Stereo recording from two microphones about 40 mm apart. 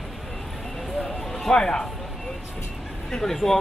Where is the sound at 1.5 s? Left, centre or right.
Centre.